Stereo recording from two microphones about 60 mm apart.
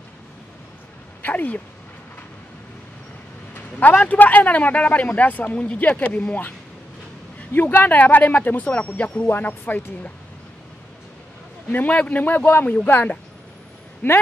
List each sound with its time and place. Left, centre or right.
1.2 s speech: left
3.5 s a man's voice: left
7.5 s a man's voice: left
9.3 s speech: left
11.7 s a man's voice: left